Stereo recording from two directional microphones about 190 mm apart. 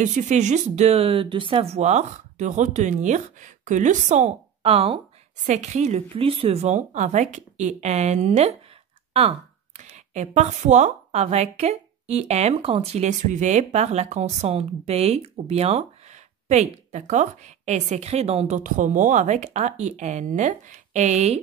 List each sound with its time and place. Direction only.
0.0 s a woman's voice: 40° right (ahead or behind)
9.8 s a woman's voice: 35° right (ahead or behind)